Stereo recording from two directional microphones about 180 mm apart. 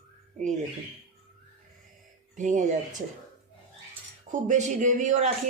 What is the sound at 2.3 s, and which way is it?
Speech, 45° right (ahead or behind).